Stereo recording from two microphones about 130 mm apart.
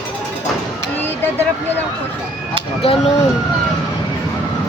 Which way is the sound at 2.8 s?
45° left (ahead or behind).